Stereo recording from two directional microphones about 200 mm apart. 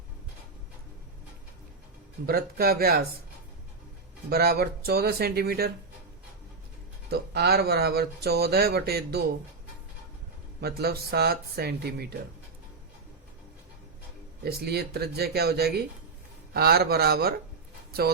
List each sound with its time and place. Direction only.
2.2 s speech: 50° right (ahead or behind)
4.3 s speech: 50° right (ahead or behind)
7.1 s speech: 55° right (ahead or behind)
10.6 s speech: 55° right (ahead or behind)
14.4 s speech: 50° right (ahead or behind)